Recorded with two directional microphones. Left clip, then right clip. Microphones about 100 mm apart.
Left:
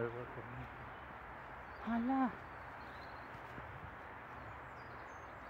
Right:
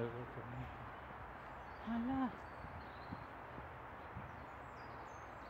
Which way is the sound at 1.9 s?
25° left (ahead or behind).